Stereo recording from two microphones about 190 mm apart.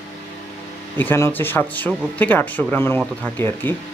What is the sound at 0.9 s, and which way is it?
Speech, 10° left (ahead or behind).